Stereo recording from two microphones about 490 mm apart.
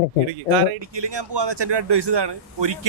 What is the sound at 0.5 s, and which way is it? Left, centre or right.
A man's voice, right.